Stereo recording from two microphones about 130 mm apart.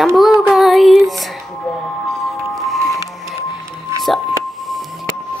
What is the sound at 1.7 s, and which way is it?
Music, centre (ahead or behind).